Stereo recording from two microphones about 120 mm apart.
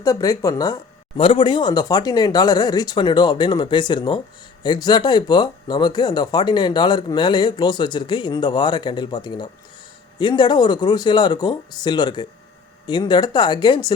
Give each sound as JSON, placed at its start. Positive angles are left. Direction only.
{"t": 0.0, "sound": "speech", "side_deg": 25}
{"t": 1.1, "sound": "speech", "side_deg": 45}